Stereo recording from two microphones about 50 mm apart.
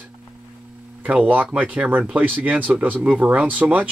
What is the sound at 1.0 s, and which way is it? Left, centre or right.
Speech, right.